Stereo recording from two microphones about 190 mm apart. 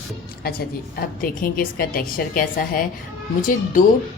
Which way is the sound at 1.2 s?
50° left (ahead or behind).